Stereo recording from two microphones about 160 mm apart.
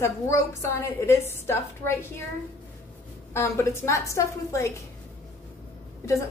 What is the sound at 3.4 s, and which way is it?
A woman's voice, 15° left (ahead or behind).